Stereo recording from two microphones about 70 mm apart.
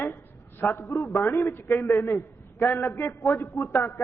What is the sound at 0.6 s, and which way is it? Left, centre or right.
A man's voice, left.